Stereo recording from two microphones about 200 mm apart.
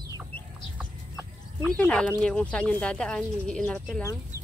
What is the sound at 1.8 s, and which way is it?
Speech, 5° left (ahead or behind).